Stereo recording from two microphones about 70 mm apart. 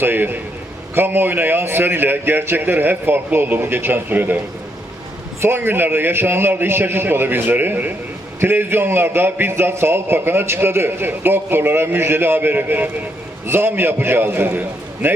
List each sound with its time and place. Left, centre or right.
0.0 s a man's voice: right
5.4 s a man's voice: right